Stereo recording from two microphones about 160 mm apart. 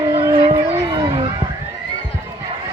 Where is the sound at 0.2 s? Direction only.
20° right (ahead or behind).